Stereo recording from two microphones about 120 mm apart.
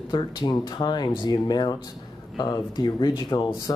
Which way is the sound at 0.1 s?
40° left (ahead or behind).